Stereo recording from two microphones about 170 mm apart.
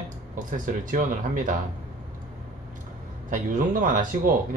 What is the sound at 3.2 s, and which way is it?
Speech, 50° right (ahead or behind).